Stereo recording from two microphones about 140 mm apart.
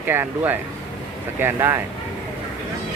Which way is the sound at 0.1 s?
15° right (ahead or behind).